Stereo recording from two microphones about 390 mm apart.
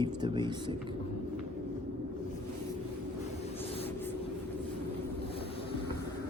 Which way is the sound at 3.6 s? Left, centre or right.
Centre.